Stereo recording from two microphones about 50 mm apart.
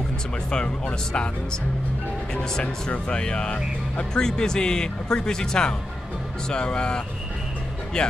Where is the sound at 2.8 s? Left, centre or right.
Left.